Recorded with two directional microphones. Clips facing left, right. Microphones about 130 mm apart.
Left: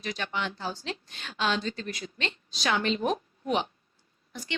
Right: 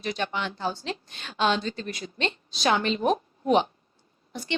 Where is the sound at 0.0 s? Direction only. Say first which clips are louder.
Right 3 dB; 30° right (ahead or behind).